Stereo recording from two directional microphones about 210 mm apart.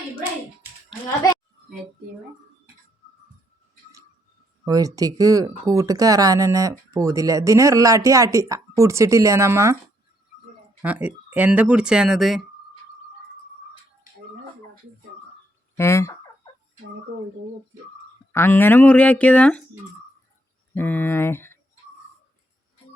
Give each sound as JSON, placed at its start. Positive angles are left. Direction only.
{"t": 4.6, "sound": "speech", "side_deg": -15}
{"t": 10.8, "sound": "speech", "side_deg": -10}
{"t": 15.8, "sound": "speech", "side_deg": 15}
{"t": 18.3, "sound": "speech", "side_deg": 10}
{"t": 20.7, "sound": "speech", "side_deg": 10}